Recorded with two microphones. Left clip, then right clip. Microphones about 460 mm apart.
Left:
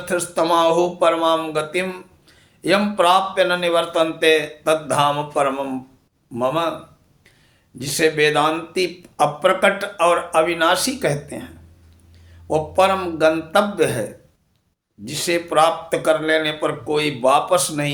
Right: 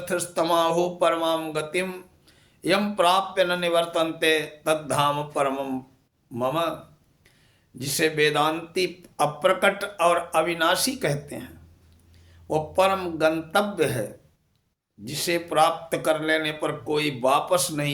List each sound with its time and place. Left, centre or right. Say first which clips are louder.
0.0 s speech: left 5 dB; right
7.8 s speech: left 5 dB; right